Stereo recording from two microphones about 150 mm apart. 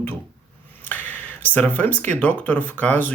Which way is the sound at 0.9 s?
10° left (ahead or behind).